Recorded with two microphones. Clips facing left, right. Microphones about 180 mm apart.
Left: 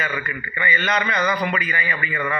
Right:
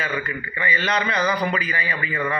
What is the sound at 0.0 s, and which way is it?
A man's voice, 30° right (ahead or behind).